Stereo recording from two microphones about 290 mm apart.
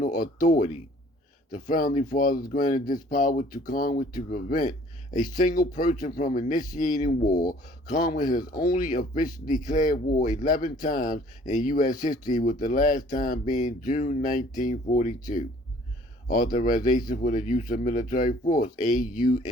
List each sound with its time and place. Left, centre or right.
1.5 s speech: left